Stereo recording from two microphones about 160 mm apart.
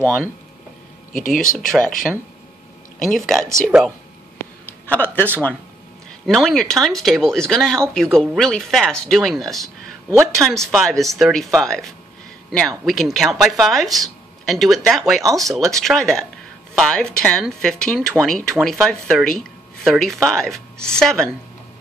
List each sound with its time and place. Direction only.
0.0 s speech: 5° left (ahead or behind)
1.1 s speech: 55° left (ahead or behind)
3.1 s speech: 5° left (ahead or behind)